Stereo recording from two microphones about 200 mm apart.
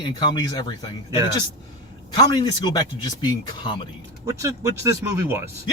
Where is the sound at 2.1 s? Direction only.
20° left (ahead or behind).